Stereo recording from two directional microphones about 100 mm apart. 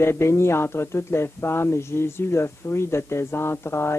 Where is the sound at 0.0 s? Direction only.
25° left (ahead or behind).